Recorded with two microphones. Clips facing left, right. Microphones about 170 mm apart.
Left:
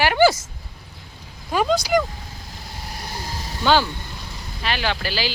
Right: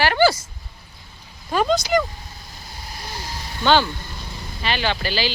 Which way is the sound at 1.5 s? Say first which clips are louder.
Even; 5° left (ahead or behind).